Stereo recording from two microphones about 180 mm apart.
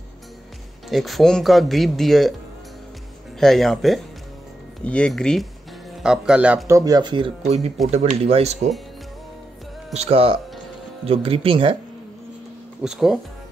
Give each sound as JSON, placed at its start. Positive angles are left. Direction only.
{"t": 0.8, "sound": "speech", "side_deg": 0}
{"t": 3.3, "sound": "speech", "side_deg": 0}
{"t": 6.8, "sound": "speech", "side_deg": -20}
{"t": 9.9, "sound": "speech", "side_deg": -35}
{"t": 12.8, "sound": "speech", "side_deg": -5}